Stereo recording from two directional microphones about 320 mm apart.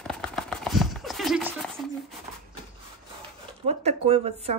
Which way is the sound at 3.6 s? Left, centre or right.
Centre.